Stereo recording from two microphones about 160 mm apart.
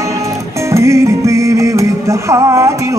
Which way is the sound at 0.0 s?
20° right (ahead or behind).